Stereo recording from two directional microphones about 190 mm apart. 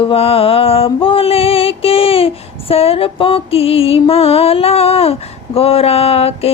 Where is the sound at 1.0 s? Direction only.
30° left (ahead or behind).